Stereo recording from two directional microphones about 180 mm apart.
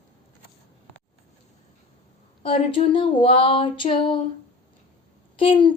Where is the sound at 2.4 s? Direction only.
30° left (ahead or behind).